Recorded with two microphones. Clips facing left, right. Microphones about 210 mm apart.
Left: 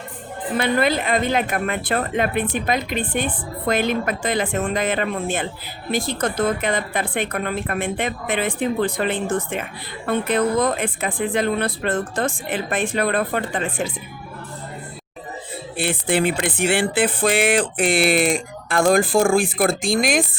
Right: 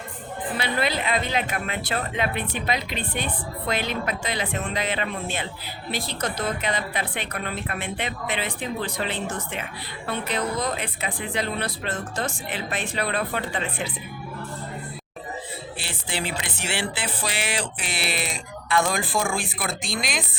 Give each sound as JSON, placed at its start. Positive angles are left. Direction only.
{"t": 0.5, "sound": "speech", "side_deg": 50}
{"t": 15.8, "sound": "speech", "side_deg": 55}